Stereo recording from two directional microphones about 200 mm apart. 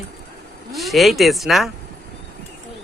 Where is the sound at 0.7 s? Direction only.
Centre (ahead or behind).